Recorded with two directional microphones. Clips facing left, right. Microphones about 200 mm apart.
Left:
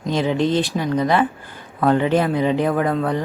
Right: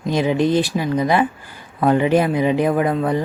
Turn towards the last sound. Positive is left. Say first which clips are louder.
# right 2 dB
turn(degrees=-15)  # may be behind; listen again after turning